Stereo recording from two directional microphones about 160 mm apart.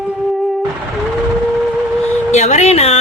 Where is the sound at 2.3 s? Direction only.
45° left (ahead or behind).